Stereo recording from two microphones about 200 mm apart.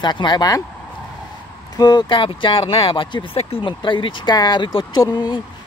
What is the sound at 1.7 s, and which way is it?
Speech, 20° left (ahead or behind).